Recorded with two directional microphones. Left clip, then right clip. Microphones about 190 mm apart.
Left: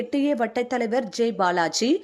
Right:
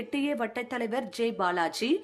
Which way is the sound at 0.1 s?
20° left (ahead or behind).